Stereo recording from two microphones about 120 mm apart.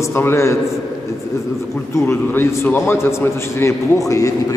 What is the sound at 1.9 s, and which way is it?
A man's voice, 20° left (ahead or behind).